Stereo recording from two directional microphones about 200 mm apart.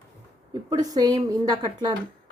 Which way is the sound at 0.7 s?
20° right (ahead or behind).